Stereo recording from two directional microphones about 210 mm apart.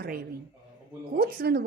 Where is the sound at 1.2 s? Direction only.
45° right (ahead or behind).